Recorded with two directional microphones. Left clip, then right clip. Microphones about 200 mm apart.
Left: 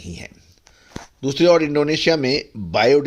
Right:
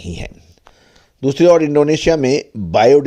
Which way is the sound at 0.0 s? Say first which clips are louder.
Right 6 dB; 40° right (ahead or behind).